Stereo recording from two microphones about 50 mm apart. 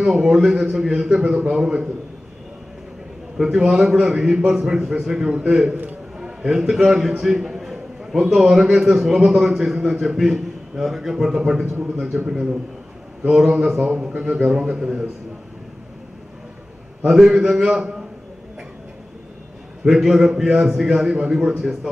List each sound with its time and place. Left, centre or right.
0.0 s a man's voice: centre
3.3 s a man's voice: centre
5.3 s a man's voice: centre
12.3 s a man's voice: centre
17.0 s a man's voice: centre
19.8 s a man's voice: centre